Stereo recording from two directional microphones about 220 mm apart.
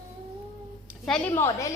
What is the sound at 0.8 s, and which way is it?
Speech, 5° left (ahead or behind).